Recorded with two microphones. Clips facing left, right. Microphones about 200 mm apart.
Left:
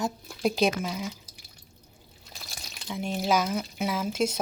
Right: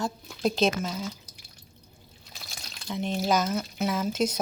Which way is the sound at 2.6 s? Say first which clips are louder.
Right 2 dB; 5° left (ahead or behind).